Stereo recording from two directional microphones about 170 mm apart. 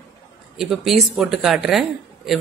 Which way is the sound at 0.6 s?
Centre (ahead or behind).